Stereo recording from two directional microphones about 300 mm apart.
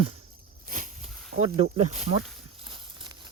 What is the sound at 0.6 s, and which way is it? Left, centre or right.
Snake, right.